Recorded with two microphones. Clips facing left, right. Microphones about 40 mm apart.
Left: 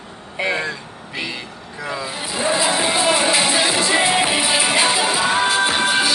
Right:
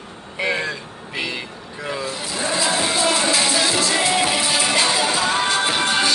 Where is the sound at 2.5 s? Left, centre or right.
Centre.